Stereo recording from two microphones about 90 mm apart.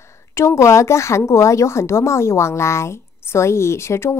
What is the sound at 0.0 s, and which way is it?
A woman's voice, 30° left (ahead or behind).